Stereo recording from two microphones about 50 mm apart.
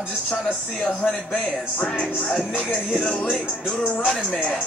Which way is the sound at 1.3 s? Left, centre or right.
Centre.